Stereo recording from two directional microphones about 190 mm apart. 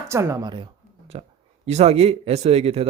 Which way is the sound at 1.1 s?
35° right (ahead or behind).